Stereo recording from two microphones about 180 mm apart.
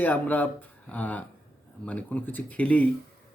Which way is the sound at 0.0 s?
10° left (ahead or behind).